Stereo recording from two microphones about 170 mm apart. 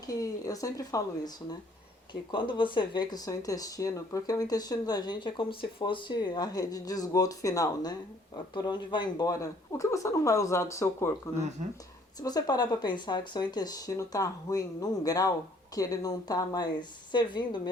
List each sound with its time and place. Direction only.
0.1 s speech: 20° left (ahead or behind)
12.2 s speech: 20° left (ahead or behind)